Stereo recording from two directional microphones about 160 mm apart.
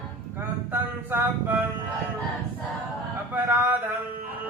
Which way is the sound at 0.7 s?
15° right (ahead or behind).